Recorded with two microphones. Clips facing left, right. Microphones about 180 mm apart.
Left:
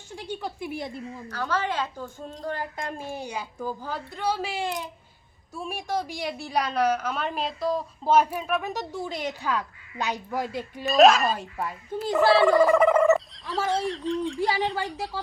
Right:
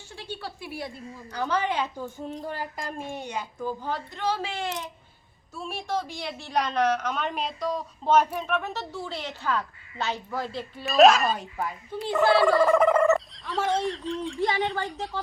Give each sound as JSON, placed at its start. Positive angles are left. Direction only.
{"t": 0.1, "sound": "speech", "side_deg": 15}
{"t": 1.3, "sound": "a woman's voice", "side_deg": -15}
{"t": 10.8, "sound": "speech", "side_deg": 0}
{"t": 12.2, "sound": "speech", "side_deg": 25}
{"t": 12.5, "sound": "speech", "side_deg": 10}